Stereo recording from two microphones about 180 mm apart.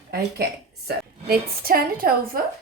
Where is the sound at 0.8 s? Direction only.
55° right (ahead or behind).